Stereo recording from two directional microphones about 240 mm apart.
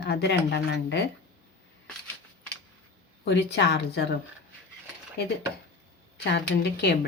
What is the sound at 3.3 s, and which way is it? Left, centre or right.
Speech, left.